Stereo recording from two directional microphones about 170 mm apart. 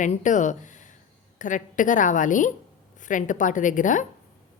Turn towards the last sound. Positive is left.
turn(degrees=50)  # may be behind; listen again after turning